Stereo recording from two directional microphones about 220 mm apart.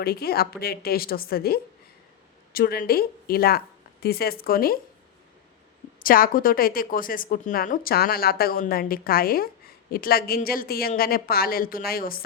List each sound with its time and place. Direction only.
0.0 s a woman's voice: 45° left (ahead or behind)
6.0 s a woman's voice: 40° left (ahead or behind)